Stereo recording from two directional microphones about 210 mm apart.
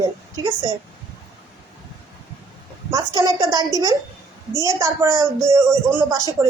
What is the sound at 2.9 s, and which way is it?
A woman's voice, 20° right (ahead or behind).